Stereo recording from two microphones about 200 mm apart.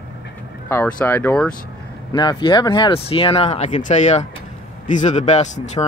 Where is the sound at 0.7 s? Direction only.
10° left (ahead or behind).